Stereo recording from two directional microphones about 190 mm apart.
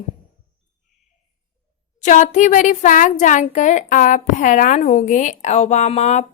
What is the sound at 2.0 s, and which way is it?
A woman's voice, 40° left (ahead or behind).